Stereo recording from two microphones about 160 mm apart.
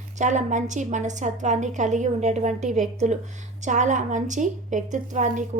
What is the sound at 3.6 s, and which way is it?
A woman's voice, 50° right (ahead or behind).